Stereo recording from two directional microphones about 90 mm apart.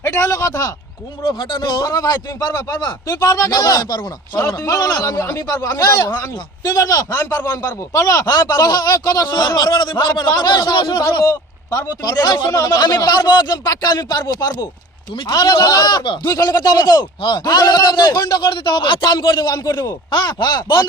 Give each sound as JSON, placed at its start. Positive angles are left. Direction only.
{"t": 0.0, "sound": "speech", "side_deg": 30}
{"t": 1.2, "sound": "speech", "side_deg": 55}
{"t": 1.8, "sound": "a man's voice", "side_deg": 45}
{"t": 11.2, "sound": "a man's voice", "side_deg": 35}
{"t": 16.2, "sound": "a man's voice", "side_deg": 40}